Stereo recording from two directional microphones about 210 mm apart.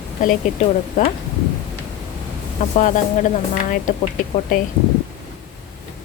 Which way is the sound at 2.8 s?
35° left (ahead or behind).